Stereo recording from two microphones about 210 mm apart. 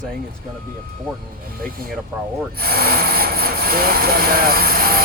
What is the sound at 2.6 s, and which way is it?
Speech, 45° right (ahead or behind).